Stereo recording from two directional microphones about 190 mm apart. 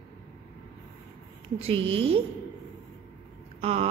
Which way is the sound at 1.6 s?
30° right (ahead or behind).